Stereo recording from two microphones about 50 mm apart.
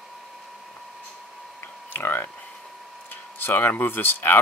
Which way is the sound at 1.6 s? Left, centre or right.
Left.